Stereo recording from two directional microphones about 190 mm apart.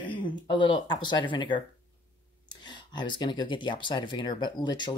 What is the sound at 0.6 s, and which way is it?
Speech, 25° left (ahead or behind).